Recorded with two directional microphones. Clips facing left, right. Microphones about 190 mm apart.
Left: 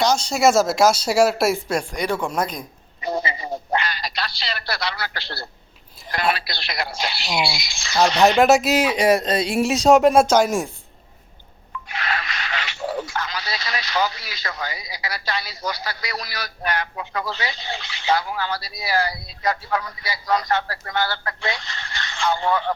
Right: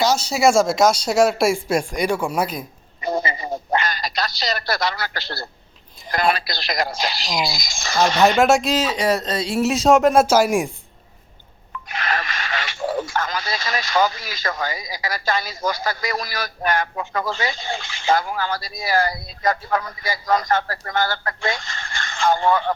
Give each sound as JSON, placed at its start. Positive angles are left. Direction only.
{"t": 0.0, "sound": "speech", "side_deg": 0}
{"t": 1.6, "sound": "speech", "side_deg": -10}
{"t": 3.0, "sound": "telephone", "side_deg": -50}
{"t": 6.3, "sound": "speech", "side_deg": -40}
{"t": 8.4, "sound": "speech", "side_deg": 0}
{"t": 9.6, "sound": "speech", "side_deg": 0}
{"t": 11.9, "sound": "speech", "side_deg": -45}